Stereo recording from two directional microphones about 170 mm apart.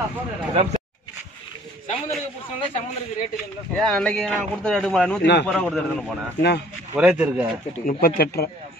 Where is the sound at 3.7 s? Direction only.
5° left (ahead or behind).